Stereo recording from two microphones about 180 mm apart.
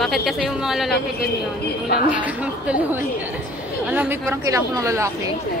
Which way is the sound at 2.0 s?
10° right (ahead or behind).